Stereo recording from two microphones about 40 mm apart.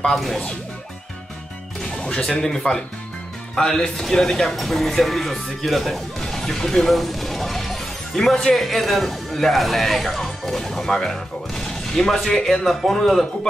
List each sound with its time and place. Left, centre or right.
0.1 s speech: centre
2.0 s music: left
2.4 s speech: centre